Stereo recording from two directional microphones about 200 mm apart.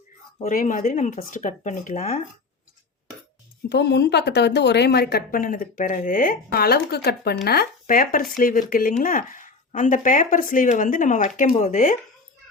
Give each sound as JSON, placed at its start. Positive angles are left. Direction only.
{"t": 0.4, "sound": "speech", "side_deg": 45}
{"t": 3.7, "sound": "a woman's voice", "side_deg": 55}